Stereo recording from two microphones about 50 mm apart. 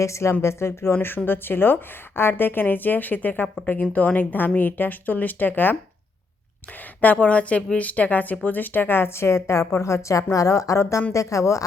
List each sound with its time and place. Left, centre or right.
0.0 s speech: left
0.4 s speech: left
1.0 s a woman's voice: left
7.0 s speech: left
11.1 s speech: left